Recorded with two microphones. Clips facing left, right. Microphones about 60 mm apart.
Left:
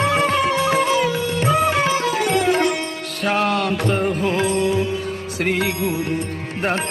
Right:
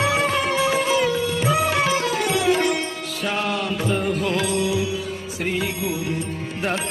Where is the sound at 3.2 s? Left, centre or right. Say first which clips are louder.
Left 5 dB; left.